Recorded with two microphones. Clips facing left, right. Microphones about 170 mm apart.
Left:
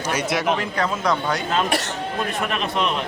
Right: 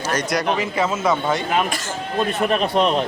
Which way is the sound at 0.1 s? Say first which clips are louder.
Even; 5° left (ahead or behind).